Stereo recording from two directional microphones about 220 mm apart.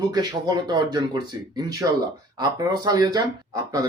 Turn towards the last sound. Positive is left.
turn(degrees=-15)  # may be behind; listen again after turning